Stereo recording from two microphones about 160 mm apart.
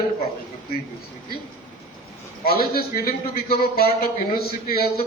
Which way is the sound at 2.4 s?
70° left (ahead or behind).